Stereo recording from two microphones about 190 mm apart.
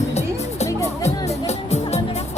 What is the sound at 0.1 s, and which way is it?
Music, 35° left (ahead or behind).